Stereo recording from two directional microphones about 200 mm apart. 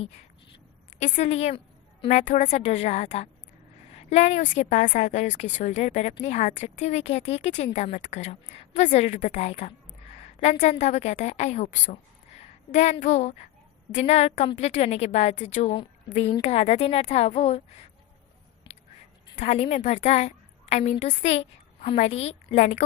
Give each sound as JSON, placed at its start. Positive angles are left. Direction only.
{"t": 0.9, "sound": "a woman's voice", "side_deg": 35}
{"t": 19.4, "sound": "a woman's voice", "side_deg": 35}